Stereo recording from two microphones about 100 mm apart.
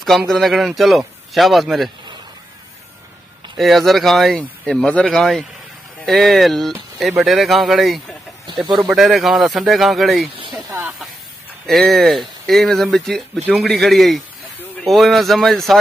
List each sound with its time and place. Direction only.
0.3 s speech: centre (ahead or behind)
3.5 s speech: centre (ahead or behind)
11.6 s speech: centre (ahead or behind)